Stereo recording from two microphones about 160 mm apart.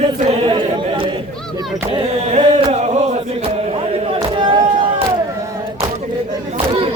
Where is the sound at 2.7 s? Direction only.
45° right (ahead or behind).